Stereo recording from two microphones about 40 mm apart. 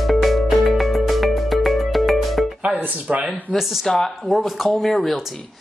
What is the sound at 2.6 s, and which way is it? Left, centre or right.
Music, right.